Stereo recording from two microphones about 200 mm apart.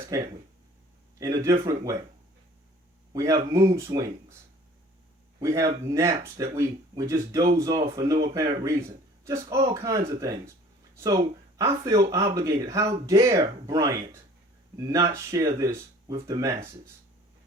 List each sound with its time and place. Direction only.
0.1 s speech: 15° right (ahead or behind)
3.1 s speech: 15° right (ahead or behind)
5.4 s speech: 15° right (ahead or behind)